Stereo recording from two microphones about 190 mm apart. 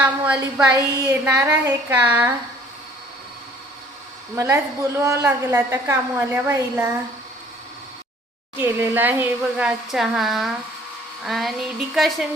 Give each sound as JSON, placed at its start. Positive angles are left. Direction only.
{"t": 0.0, "sound": "a woman's voice", "side_deg": -5}
{"t": 4.4, "sound": "a woman's voice", "side_deg": -15}
{"t": 8.5, "sound": "a woman's voice", "side_deg": -10}
{"t": 11.3, "sound": "a sound", "side_deg": 0}